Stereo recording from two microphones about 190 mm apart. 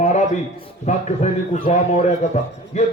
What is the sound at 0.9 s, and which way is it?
A man's voice, 40° left (ahead or behind).